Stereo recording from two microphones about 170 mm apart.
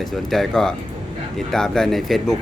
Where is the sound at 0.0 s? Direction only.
Centre (ahead or behind).